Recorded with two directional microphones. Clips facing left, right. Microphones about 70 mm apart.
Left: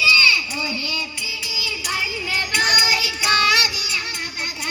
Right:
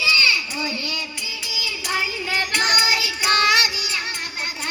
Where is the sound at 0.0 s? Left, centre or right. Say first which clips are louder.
Left 3 dB; right.